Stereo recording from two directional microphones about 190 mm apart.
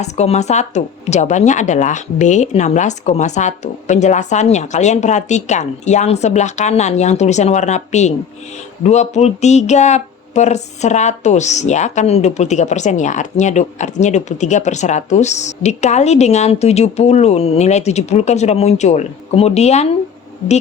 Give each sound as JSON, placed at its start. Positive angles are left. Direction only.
{"t": 0.0, "sound": "speech", "side_deg": 35}